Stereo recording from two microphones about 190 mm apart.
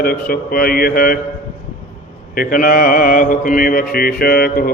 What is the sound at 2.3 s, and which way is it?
Mantra, 50° left (ahead or behind).